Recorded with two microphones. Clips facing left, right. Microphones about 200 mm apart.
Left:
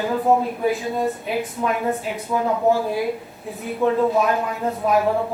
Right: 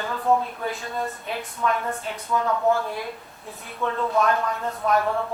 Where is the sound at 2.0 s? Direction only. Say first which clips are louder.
Left 3 dB; 5° left (ahead or behind).